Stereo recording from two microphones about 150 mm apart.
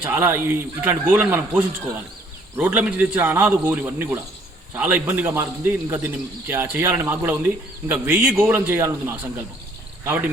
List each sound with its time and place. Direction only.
0.0 s a man's voice: 15° right (ahead or behind)